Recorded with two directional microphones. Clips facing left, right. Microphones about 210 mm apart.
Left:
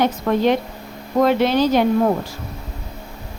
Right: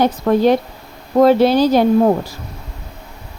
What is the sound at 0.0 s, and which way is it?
Speech, 35° right (ahead or behind).